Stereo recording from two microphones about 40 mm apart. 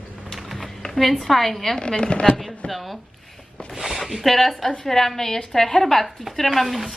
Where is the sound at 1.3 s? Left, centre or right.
Centre.